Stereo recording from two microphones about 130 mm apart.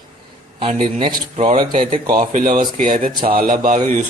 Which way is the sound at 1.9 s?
30° right (ahead or behind).